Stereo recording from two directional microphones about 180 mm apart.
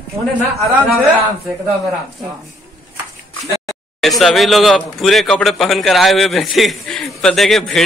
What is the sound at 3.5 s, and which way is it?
Speech, centre (ahead or behind).